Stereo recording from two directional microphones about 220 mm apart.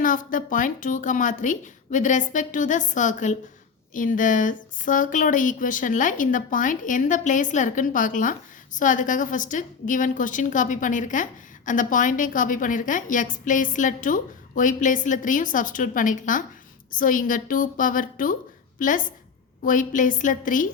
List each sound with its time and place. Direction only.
0.0 s speech: 40° left (ahead or behind)